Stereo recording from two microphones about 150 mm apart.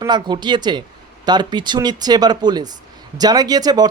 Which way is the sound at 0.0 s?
30° right (ahead or behind).